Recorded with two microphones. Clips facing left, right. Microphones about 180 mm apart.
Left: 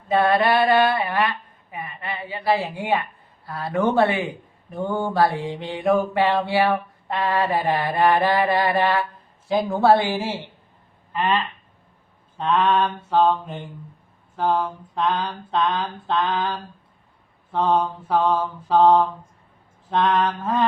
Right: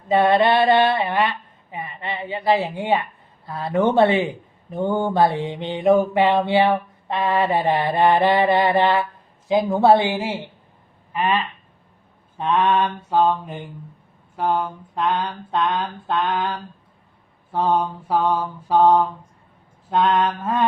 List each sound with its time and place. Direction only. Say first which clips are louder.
0.1 s mantra: right 2 dB; 25° right (ahead or behind)
11.1 s duck: right 1 dB; 10° right (ahead or behind)
12.4 s mantra: right 1 dB; 15° right (ahead or behind)
17.7 s mantra: even; 10° right (ahead or behind)